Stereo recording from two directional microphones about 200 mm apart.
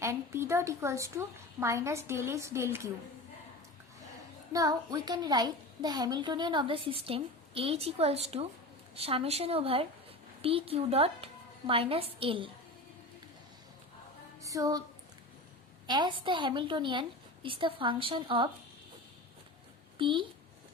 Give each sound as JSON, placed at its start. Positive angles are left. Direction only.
{"t": 0.0, "sound": "a woman's voice", "side_deg": -15}
{"t": 4.5, "sound": "a woman's voice", "side_deg": -15}
{"t": 14.4, "sound": "music", "side_deg": -15}
{"t": 15.9, "sound": "a woman's voice", "side_deg": -20}
{"t": 20.0, "sound": "a woman's voice", "side_deg": -25}